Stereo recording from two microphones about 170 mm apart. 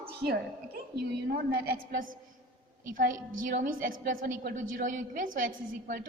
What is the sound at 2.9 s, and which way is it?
A woman's voice, 55° right (ahead or behind).